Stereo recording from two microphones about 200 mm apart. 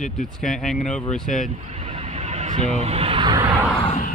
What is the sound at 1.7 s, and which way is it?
Vehicle, 35° right (ahead or behind).